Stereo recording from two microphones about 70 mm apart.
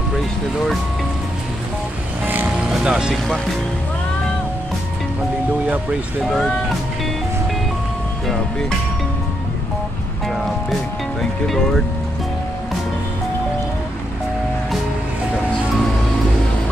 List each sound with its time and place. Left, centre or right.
0.1 s a sound: centre
2.2 s music: right
2.7 s speech: centre
6.2 s speech: centre
8.3 s speech: centre
10.2 s music: centre